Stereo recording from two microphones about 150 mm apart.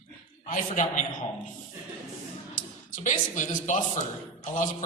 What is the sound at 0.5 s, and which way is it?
Speech, 60° left (ahead or behind).